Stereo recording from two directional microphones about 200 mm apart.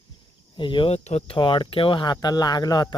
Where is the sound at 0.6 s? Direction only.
25° left (ahead or behind).